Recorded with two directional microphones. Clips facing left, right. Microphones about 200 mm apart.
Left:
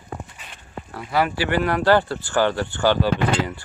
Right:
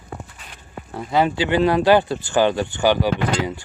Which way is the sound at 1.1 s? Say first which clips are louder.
Right 3 dB; 20° right (ahead or behind).